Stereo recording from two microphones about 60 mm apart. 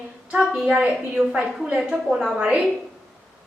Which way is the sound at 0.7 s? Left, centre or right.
Centre.